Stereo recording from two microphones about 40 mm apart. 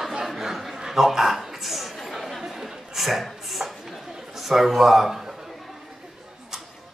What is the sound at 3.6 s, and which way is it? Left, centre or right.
Chatter, right.